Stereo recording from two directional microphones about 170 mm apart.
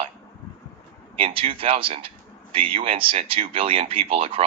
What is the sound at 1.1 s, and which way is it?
Speech, 35° right (ahead or behind).